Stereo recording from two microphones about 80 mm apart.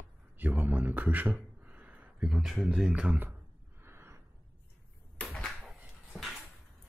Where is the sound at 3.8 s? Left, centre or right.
Right.